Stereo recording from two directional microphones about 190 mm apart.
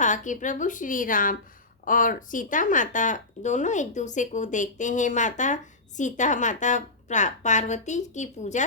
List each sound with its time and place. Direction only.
0.0 s speech: 40° left (ahead or behind)